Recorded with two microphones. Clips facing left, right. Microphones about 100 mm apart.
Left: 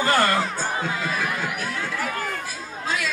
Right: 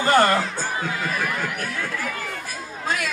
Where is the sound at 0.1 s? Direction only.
25° right (ahead or behind).